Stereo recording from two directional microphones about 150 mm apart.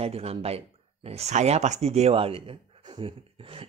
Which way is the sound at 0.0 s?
40° right (ahead or behind).